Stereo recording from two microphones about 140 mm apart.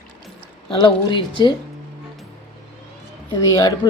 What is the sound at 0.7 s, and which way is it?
Speech, 35° left (ahead or behind).